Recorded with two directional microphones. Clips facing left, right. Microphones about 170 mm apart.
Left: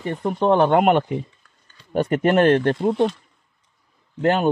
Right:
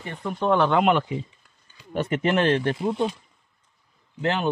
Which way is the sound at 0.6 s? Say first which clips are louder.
Left 3 dB; 50° left (ahead or behind).